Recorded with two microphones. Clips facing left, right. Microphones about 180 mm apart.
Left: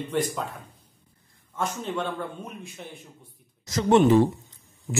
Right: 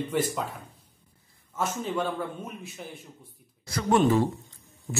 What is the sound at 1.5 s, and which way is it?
A man's voice, 5° right (ahead or behind).